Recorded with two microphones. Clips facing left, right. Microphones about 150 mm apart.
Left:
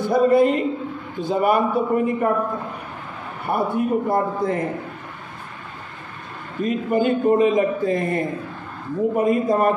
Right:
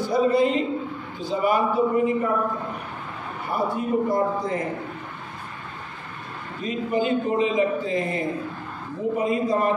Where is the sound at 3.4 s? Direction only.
55° left (ahead or behind).